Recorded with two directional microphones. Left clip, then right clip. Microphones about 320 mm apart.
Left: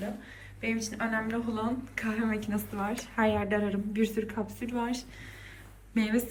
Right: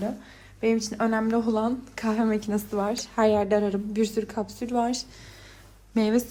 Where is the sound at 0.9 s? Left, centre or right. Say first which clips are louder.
Right 7 dB; centre.